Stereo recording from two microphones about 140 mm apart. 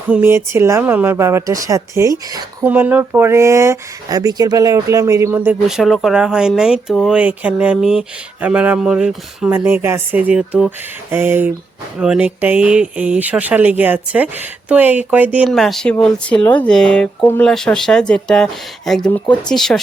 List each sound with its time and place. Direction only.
0.1 s speech: 15° right (ahead or behind)
2.6 s speech: 10° right (ahead or behind)
5.6 s speech: centre (ahead or behind)
15.4 s speech: centre (ahead or behind)